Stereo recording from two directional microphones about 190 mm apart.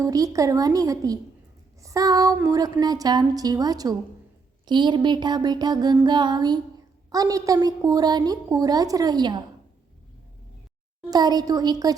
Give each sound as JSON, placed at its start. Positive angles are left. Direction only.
{"t": 0.0, "sound": "a woman's voice", "side_deg": -15}
{"t": 1.8, "sound": "a sound", "side_deg": -15}
{"t": 2.8, "sound": "a woman's voice", "side_deg": -20}
{"t": 11.1, "sound": "a woman's voice", "side_deg": -20}